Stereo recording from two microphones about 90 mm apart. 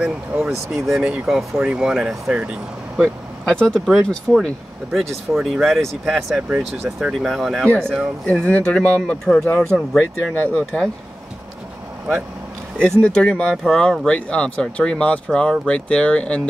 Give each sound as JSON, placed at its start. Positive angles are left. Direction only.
{"t": 0.0, "sound": "speech", "side_deg": -20}
{"t": 0.8, "sound": "speech", "side_deg": -5}
{"t": 3.4, "sound": "speech", "side_deg": 5}
{"t": 8.3, "sound": "speech", "side_deg": 15}
{"t": 12.7, "sound": "speech", "side_deg": 10}